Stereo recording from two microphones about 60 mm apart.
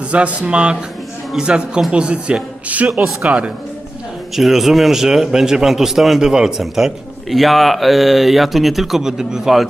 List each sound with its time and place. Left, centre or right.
0.1 s a man's voice: right
2.9 s speech: centre
4.4 s a man's voice: centre